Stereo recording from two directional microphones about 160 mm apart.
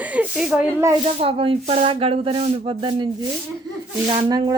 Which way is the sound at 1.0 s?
35° right (ahead or behind).